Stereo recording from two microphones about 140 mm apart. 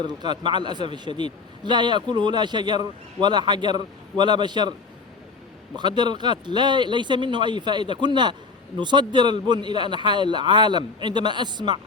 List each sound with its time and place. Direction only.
0.0 s a man's voice: 30° right (ahead or behind)
5.7 s a man's voice: 35° right (ahead or behind)